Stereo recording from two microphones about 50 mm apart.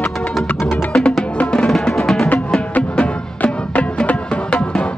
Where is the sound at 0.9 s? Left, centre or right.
Centre.